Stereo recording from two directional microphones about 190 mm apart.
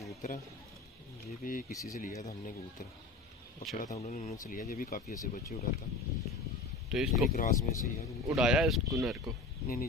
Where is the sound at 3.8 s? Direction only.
40° left (ahead or behind).